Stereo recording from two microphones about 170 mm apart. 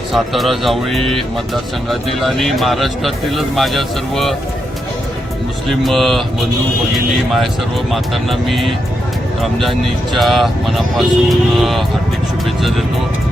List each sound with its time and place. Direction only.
0.1 s speech: centre (ahead or behind)
0.9 s speech: 35° right (ahead or behind)
1.9 s speech: centre (ahead or behind)
5.6 s speech: centre (ahead or behind)
7.9 s speech: centre (ahead or behind)